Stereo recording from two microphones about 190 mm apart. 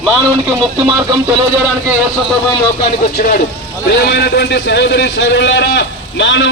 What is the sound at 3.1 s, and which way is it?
A man's voice, 50° left (ahead or behind).